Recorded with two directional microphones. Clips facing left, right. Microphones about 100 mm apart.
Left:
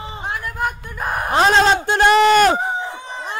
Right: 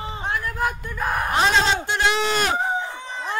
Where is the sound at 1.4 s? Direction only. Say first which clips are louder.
Left 7 dB; 50° left (ahead or behind).